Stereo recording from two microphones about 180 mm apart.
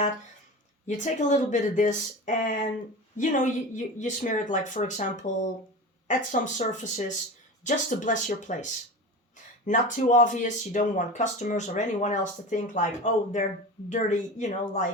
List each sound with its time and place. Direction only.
0.9 s speech: 40° left (ahead or behind)
9.6 s speech: 45° left (ahead or behind)